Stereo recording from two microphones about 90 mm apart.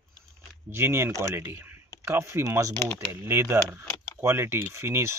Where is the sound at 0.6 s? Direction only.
25° right (ahead or behind).